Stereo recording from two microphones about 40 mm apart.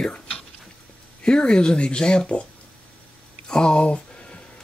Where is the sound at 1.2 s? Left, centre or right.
Left.